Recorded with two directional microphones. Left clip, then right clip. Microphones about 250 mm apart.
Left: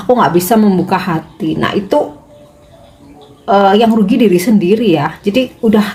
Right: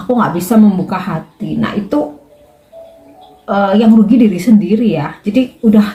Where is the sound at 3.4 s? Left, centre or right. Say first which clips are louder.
Left 3 dB; left.